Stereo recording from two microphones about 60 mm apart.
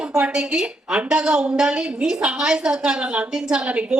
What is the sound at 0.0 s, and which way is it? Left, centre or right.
A woman's voice, centre.